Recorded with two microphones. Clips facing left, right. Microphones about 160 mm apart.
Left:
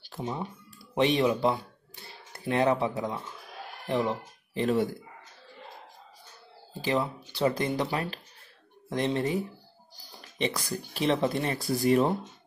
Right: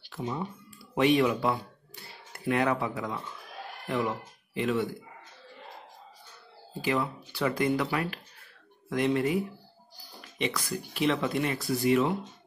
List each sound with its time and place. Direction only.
0.0 s a sound: 35° left (ahead or behind)
0.9 s speech: 25° left (ahead or behind)
6.8 s speech: 30° left (ahead or behind)
10.4 s speech: 35° left (ahead or behind)